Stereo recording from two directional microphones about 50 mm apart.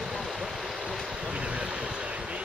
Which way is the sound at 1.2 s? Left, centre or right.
Right.